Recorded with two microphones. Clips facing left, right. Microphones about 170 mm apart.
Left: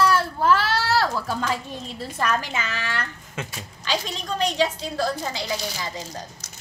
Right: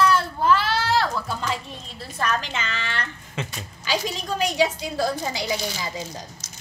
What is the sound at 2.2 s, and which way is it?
A woman's voice, 5° left (ahead or behind).